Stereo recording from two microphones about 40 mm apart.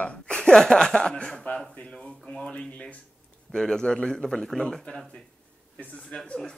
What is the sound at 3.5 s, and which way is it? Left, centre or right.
A man's voice, centre.